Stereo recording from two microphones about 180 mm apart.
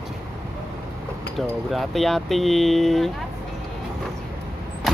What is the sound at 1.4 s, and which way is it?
Speech, centre (ahead or behind).